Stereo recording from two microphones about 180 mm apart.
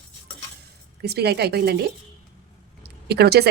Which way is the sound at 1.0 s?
65° right (ahead or behind).